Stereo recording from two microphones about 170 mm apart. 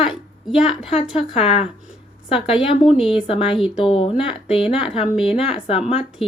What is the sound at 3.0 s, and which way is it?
Speech, 5° right (ahead or behind).